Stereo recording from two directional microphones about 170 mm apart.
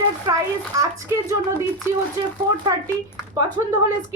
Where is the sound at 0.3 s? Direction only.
20° right (ahead or behind).